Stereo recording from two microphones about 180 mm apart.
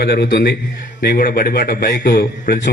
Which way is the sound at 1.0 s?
55° left (ahead or behind).